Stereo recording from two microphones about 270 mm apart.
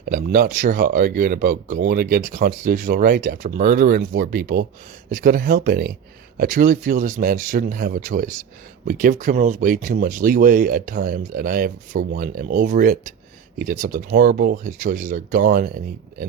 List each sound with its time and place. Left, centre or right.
0.0 s speech: right